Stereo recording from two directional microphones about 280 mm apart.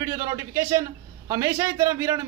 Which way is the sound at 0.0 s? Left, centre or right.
Centre.